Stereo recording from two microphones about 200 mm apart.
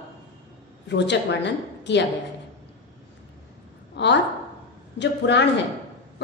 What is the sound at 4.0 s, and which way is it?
A woman's voice, 60° left (ahead or behind).